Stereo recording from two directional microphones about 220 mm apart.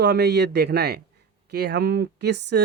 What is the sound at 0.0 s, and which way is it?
Speech, 50° right (ahead or behind).